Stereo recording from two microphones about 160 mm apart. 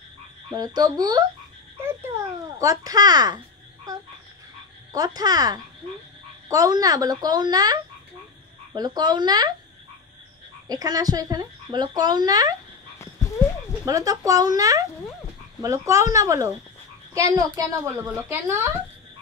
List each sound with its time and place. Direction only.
0.6 s speech: 25° right (ahead or behind)
2.6 s speech: 20° right (ahead or behind)
4.9 s speech: 25° right (ahead or behind)
10.7 s speech: 25° right (ahead or behind)
13.8 s a woman's voice: 20° right (ahead or behind)